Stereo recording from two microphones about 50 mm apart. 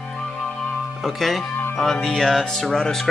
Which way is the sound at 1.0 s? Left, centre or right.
Centre.